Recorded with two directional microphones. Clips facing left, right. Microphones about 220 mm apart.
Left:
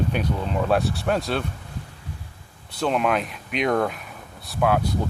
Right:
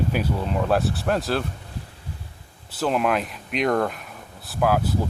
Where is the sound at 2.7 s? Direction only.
5° right (ahead or behind).